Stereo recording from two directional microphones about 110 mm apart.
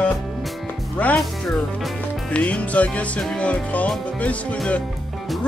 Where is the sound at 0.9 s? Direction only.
15° left (ahead or behind).